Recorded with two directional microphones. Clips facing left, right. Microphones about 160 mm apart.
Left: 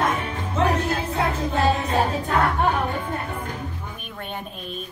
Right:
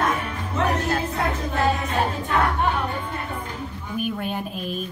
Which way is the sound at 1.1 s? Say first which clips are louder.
Left 2 dB; 30° left (ahead or behind).